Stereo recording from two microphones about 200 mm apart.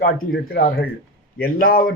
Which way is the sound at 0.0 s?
50° left (ahead or behind).